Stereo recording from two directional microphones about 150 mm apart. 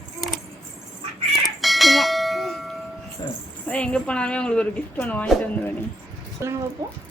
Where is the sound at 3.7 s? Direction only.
5° left (ahead or behind).